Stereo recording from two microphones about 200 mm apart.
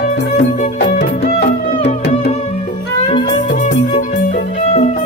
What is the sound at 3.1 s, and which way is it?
Music, 25° left (ahead or behind).